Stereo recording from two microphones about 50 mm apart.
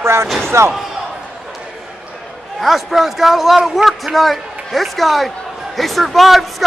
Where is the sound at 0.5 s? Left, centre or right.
Right.